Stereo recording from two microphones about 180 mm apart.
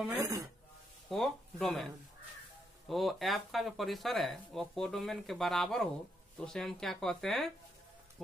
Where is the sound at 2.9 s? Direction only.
Centre (ahead or behind).